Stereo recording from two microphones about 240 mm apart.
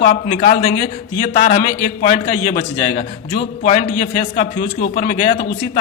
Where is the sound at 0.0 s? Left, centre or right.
Left.